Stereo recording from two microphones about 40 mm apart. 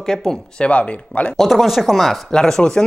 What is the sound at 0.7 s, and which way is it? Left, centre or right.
Speech, left.